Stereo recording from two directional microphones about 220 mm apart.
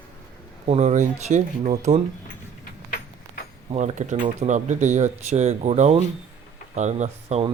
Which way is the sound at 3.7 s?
35° right (ahead or behind).